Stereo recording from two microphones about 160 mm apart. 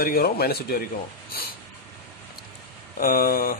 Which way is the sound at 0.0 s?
70° left (ahead or behind).